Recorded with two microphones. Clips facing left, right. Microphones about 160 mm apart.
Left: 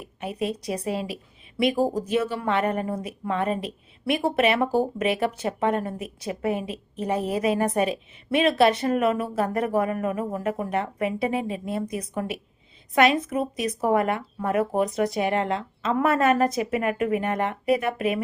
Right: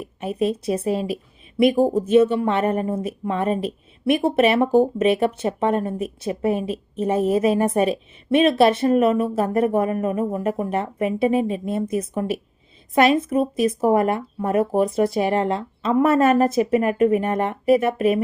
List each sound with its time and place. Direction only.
0.2 s a woman's voice: 25° right (ahead or behind)
13.3 s a woman's voice: 25° right (ahead or behind)